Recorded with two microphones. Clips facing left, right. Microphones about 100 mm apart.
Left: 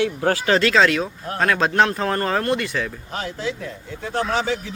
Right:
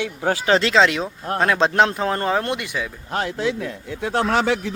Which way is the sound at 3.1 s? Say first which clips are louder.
Right 7 dB; 70° right (ahead or behind).